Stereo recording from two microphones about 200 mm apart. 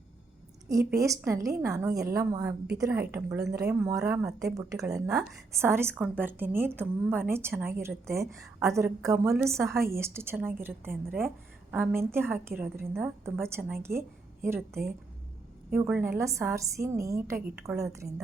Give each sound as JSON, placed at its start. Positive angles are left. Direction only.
{"t": 0.9, "sound": "a woman's voice", "side_deg": -15}